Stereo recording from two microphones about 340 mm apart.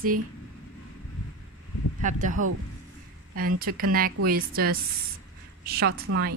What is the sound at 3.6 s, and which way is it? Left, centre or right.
A woman's voice, right.